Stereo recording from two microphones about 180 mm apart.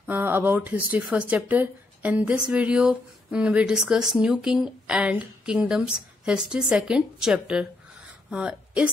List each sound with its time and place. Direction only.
0.0 s a woman's voice: 10° right (ahead or behind)